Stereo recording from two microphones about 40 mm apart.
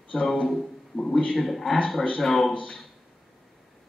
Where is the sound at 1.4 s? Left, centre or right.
Centre.